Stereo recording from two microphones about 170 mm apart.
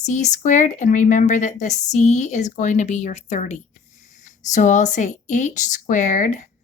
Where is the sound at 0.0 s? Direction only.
45° left (ahead or behind).